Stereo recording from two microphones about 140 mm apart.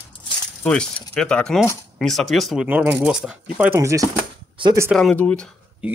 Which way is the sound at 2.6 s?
15° right (ahead or behind).